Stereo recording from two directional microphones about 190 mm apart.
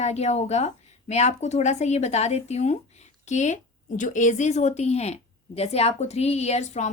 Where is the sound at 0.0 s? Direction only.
35° left (ahead or behind).